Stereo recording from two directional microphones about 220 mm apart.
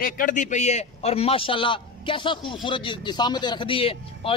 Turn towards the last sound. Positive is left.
turn(degrees=25)  # may be behind; listen again after turning